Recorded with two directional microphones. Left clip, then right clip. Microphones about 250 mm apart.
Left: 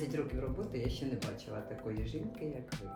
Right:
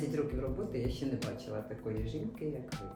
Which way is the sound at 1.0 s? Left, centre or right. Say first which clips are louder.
Right 2 dB; centre.